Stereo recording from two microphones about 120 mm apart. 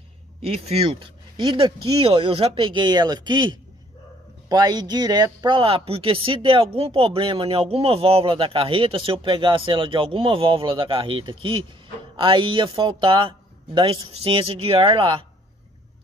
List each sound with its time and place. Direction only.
0.4 s speech: 55° right (ahead or behind)